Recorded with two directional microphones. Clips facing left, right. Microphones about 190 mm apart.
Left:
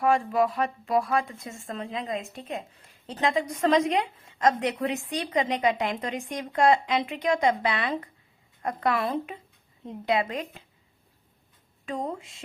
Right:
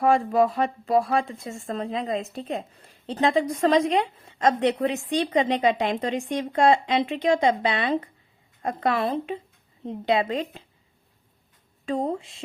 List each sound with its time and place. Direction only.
0.0 s speech: 35° right (ahead or behind)
11.9 s speech: 30° right (ahead or behind)